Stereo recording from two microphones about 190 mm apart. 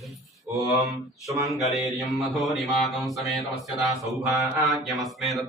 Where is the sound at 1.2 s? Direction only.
15° right (ahead or behind).